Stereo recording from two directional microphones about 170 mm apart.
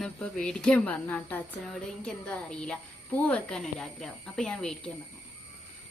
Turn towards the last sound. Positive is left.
turn(degrees=5)  # may be behind; listen again after turning